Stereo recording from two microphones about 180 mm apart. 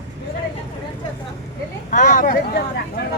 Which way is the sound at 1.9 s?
45° left (ahead or behind).